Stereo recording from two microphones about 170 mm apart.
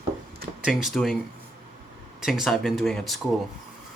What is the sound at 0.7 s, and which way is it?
Speech, centre (ahead or behind).